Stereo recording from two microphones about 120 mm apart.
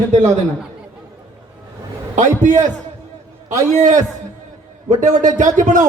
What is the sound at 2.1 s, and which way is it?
A man's voice, 90° right.